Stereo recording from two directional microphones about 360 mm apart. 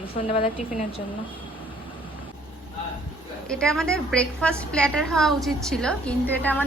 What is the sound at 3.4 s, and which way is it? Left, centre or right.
A woman's voice, centre.